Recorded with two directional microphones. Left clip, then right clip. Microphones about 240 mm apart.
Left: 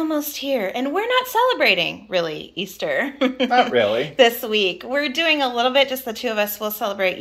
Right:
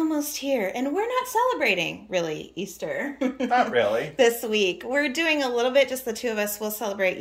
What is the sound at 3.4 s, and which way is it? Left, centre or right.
Speech, left.